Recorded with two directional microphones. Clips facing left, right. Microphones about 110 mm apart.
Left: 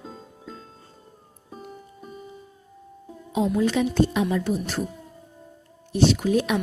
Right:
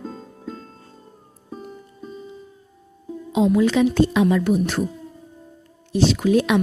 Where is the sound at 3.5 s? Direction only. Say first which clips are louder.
Right 3 dB; 90° right; by 4.8 s 70° right (ahead or behind).